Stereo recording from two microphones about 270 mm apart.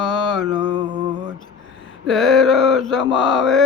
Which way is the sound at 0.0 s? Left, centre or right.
Centre.